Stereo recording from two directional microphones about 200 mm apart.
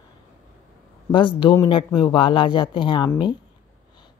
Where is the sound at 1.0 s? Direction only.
25° left (ahead or behind).